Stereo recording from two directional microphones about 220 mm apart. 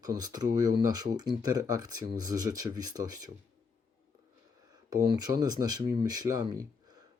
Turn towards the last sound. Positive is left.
turn(degrees=-15)  # may be behind; listen again after turning